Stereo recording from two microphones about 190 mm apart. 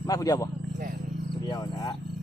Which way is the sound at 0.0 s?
20° left (ahead or behind).